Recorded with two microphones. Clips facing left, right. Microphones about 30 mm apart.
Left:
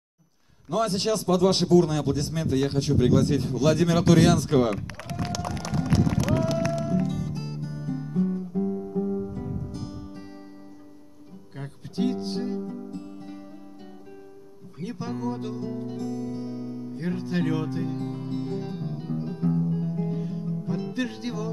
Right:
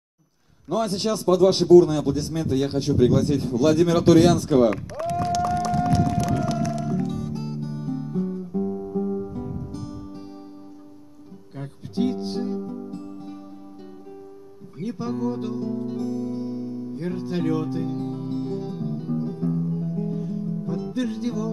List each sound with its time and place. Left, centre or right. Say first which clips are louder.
0.8 s a man's voice: right 3 dB; centre
4.9 s run: right 9 dB; left
5.3 s music: right 8 dB; centre
7.1 s music: right 2 dB; centre
7.3 s music: right 4 dB; centre
7.6 s music: right 3 dB; centre
9.8 s music: right 2 dB; centre
11.5 s music: right 4 dB; centre
15.0 s guitar: right 4 dB; centre
15.7 s music: right 4 dB; centre; by 21.5 s left